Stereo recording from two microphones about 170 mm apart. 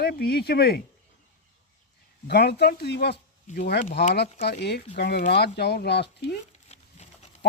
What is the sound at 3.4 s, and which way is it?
Speech, 50° left (ahead or behind).